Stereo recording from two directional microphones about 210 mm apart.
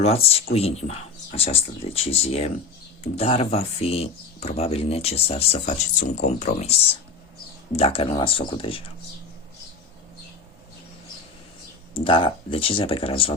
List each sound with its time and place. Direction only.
0.0 s speech: 30° left (ahead or behind)
7.8 s speech: 30° left (ahead or behind)
11.9 s speech: 25° left (ahead or behind)